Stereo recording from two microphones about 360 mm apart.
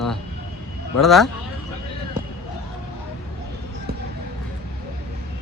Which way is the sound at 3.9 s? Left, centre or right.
Right.